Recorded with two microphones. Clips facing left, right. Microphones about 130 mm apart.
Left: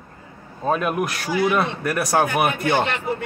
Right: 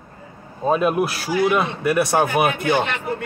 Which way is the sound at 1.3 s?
10° right (ahead or behind).